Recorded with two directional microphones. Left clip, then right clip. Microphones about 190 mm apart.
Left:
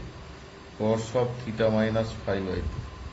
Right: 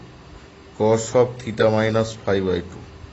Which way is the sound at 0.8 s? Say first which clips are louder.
Right 9 dB; 60° right (ahead or behind).